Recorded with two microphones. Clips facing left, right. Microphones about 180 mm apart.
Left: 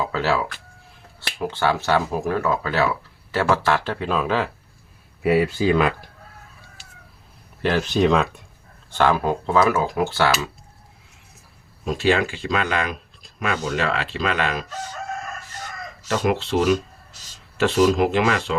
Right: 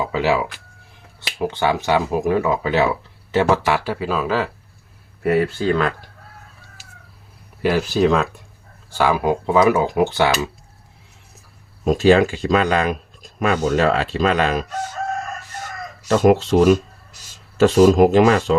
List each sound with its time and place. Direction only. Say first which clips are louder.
0.0 s speech: right 3 dB; 15° right (ahead or behind); by 5.9 s 10° left (ahead or behind)
7.6 s speech: right 2 dB; 5° right (ahead or behind)
11.9 s speech: right 7 dB; 40° right (ahead or behind)
16.2 s rub: right 7 dB; 45° right (ahead or behind)
17.6 s speech: right 6 dB; 40° right (ahead or behind)